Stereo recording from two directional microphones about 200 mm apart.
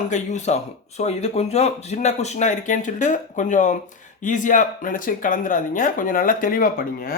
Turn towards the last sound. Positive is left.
turn(degrees=45)  # may be behind; listen again after turning